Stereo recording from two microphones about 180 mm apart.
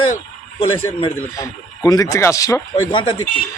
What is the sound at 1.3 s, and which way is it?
Speech, 20° left (ahead or behind).